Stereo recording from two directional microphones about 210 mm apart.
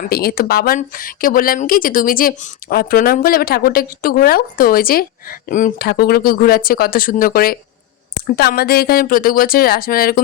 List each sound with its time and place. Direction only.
0.1 s speech: 45° left (ahead or behind)